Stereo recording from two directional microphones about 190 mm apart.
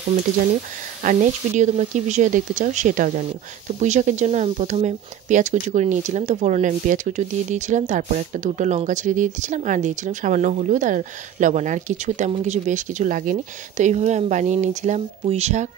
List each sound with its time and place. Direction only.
1.0 s speech: 40° right (ahead or behind)